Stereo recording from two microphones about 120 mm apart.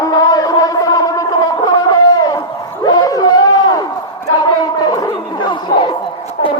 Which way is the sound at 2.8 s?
30° left (ahead or behind).